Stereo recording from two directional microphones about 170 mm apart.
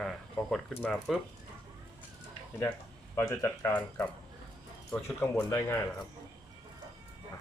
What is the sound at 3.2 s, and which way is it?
Speech, 15° left (ahead or behind).